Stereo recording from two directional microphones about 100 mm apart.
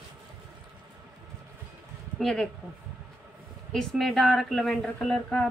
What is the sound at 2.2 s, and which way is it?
Speech, 5° left (ahead or behind).